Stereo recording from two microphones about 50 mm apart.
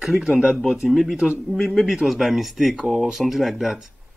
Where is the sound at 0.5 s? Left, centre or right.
Centre.